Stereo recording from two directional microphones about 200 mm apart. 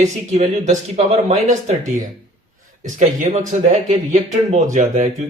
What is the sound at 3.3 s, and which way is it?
Speech, 30° right (ahead or behind).